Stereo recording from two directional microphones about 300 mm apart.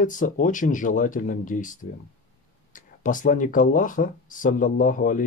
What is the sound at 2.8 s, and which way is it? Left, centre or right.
Speech, left.